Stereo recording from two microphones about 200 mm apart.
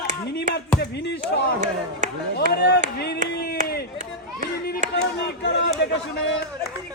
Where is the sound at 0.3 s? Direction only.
60° left (ahead or behind).